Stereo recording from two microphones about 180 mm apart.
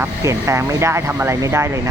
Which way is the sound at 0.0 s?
15° right (ahead or behind).